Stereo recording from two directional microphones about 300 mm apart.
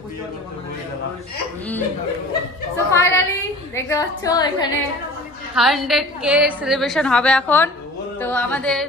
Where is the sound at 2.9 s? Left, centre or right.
Centre.